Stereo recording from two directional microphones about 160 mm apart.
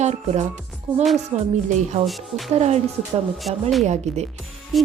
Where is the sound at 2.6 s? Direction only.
40° right (ahead or behind).